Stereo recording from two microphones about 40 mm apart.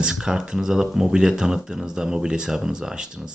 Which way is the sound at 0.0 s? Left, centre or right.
Centre.